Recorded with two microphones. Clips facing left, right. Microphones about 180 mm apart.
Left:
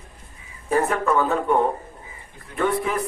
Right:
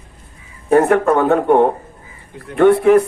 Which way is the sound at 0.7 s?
65° right (ahead or behind).